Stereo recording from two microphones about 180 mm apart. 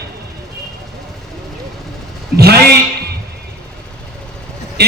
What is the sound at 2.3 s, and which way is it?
Speech, 60° right (ahead or behind).